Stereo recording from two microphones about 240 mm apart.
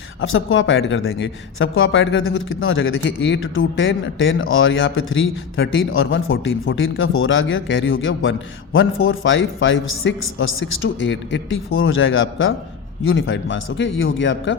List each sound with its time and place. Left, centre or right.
0.2 s speech: left